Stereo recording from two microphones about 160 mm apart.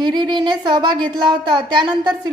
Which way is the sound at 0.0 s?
25° right (ahead or behind).